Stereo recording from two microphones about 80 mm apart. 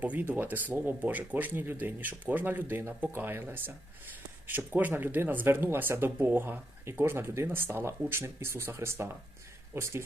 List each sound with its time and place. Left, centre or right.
0.0 s speech: right